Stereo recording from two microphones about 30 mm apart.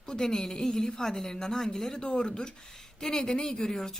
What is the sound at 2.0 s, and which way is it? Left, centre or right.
A woman's voice, left.